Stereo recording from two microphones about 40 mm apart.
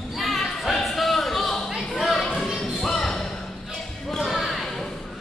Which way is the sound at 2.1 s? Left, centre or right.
Centre.